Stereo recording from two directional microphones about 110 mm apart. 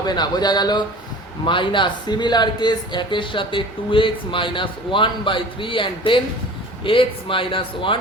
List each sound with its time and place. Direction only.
0.0 s speech: 40° left (ahead or behind)